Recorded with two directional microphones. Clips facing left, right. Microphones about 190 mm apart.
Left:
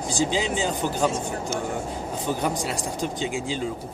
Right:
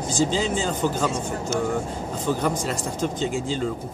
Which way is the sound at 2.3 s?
15° left (ahead or behind).